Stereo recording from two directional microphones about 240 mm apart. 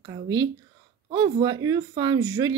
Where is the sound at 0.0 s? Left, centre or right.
Centre.